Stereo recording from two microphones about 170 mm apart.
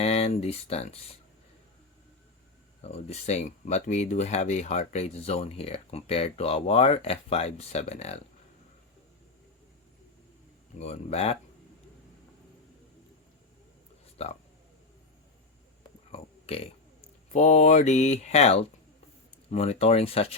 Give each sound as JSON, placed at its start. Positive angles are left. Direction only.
{"t": 0.0, "sound": "speech", "side_deg": 35}
{"t": 2.8, "sound": "speech", "side_deg": 40}
{"t": 10.8, "sound": "speech", "side_deg": 40}
{"t": 14.2, "sound": "speech", "side_deg": 35}
{"t": 15.8, "sound": "burping", "side_deg": 35}
{"t": 17.3, "sound": "speech", "side_deg": 45}